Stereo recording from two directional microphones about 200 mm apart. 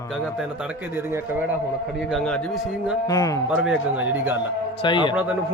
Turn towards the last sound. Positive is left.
turn(degrees=25)  # may be behind; listen again after turning